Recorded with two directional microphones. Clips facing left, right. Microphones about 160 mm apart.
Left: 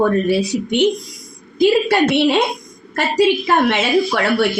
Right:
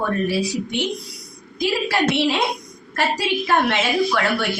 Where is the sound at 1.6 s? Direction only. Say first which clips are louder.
Left 7 dB; 65° left (ahead or behind).